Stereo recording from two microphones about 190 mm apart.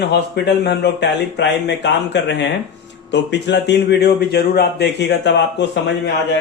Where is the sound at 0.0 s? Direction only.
60° left (ahead or behind).